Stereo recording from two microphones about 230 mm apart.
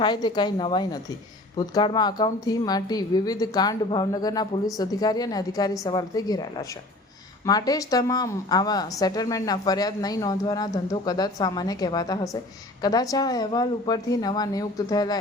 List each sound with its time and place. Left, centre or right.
0.0 s a woman's voice: centre